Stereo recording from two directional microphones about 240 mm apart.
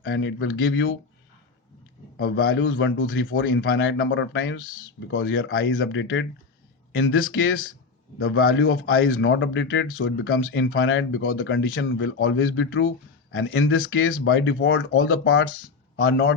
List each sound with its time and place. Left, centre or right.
0.0 s a man's voice: left
2.2 s a man's voice: left